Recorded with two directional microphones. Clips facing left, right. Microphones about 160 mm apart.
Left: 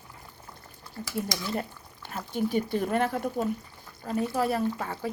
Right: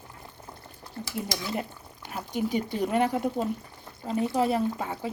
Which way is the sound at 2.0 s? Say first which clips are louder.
Even; 15° right (ahead or behind).